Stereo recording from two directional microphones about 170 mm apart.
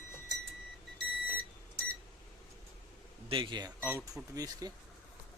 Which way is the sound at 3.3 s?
30° right (ahead or behind).